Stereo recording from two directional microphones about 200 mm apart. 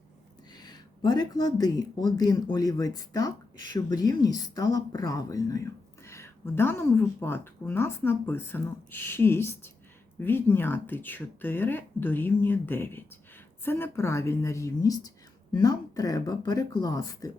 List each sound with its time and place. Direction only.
0.5 s a woman's voice: 20° left (ahead or behind)